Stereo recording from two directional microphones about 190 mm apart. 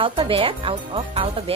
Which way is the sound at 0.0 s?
25° right (ahead or behind).